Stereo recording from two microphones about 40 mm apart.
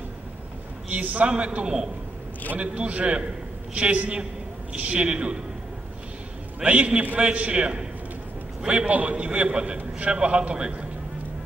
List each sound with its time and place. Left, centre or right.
0.8 s a man's voice: right
6.6 s a man's voice: right